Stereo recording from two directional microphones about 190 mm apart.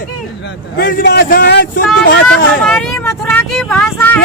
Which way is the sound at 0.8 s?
60° left (ahead or behind).